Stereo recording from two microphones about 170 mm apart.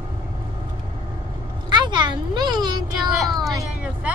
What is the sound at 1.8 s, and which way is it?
Speech, 25° right (ahead or behind).